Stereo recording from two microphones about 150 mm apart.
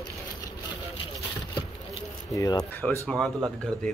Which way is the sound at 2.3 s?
25° left (ahead or behind).